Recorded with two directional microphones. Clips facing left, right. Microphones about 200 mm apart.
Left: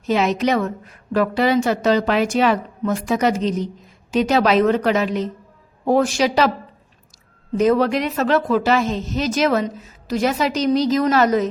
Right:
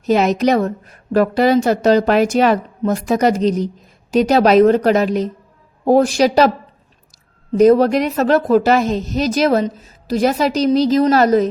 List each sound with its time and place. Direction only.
0.0 s a woman's voice: 40° right (ahead or behind)
7.5 s a woman's voice: 40° right (ahead or behind)